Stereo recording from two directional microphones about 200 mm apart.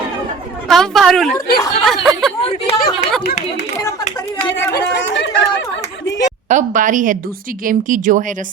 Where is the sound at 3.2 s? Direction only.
55° left (ahead or behind).